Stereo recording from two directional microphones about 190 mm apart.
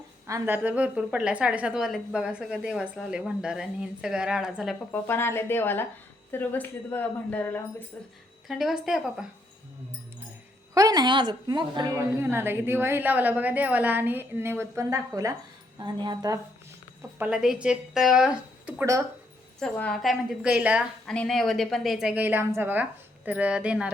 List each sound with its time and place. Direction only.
0.3 s a woman's voice: 15° right (ahead or behind)
4.9 s a woman's voice: 10° left (ahead or behind)
10.8 s a woman's voice: 20° right (ahead or behind)
17.2 s a woman's voice: 5° right (ahead or behind)
19.5 s a woman's voice: 5° left (ahead or behind)